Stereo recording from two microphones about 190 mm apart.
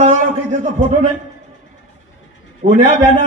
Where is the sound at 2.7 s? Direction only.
35° right (ahead or behind).